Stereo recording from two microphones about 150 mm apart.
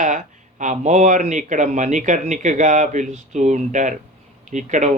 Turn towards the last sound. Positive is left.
turn(degrees=-55)  # may be behind; listen again after turning